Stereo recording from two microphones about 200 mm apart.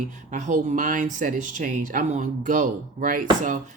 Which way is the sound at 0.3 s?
40° right (ahead or behind).